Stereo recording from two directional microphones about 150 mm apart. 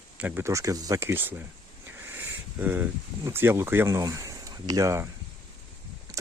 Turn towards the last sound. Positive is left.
turn(degrees=-20)  # may be behind; listen again after turning